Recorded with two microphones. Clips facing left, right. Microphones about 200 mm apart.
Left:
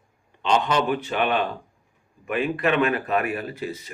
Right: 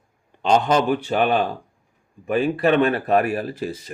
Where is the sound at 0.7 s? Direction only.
40° right (ahead or behind).